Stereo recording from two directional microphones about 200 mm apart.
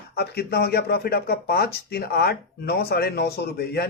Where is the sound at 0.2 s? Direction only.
55° left (ahead or behind).